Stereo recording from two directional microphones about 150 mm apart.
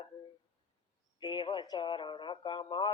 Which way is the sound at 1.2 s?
30° left (ahead or behind).